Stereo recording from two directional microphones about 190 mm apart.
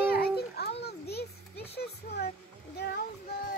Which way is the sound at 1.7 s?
55° left (ahead or behind).